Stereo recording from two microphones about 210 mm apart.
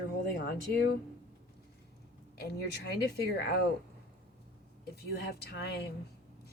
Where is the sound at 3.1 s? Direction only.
50° left (ahead or behind).